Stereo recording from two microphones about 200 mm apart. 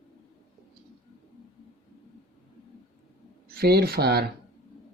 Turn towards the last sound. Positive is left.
turn(degrees=-50)  # may be behind; listen again after turning